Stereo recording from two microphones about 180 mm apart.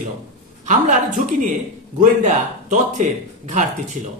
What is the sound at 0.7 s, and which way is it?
Speech, 45° right (ahead or behind).